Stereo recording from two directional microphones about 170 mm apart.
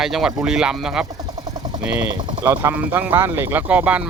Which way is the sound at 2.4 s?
15° right (ahead or behind).